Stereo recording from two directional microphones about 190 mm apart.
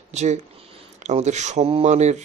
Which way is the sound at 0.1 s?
35° right (ahead or behind).